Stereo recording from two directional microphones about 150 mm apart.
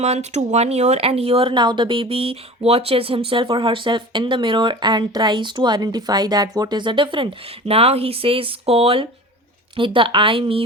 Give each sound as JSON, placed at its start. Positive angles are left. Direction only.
{"t": 0.0, "sound": "speech", "side_deg": -50}